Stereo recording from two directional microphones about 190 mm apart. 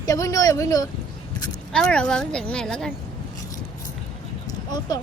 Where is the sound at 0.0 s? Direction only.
20° left (ahead or behind).